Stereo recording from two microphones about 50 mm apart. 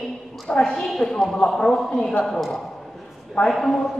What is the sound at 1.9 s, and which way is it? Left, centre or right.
Speech, centre.